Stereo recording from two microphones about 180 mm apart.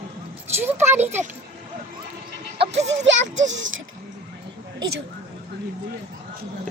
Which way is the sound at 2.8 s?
90° right.